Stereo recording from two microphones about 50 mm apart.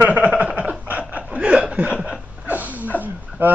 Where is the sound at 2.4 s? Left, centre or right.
Right.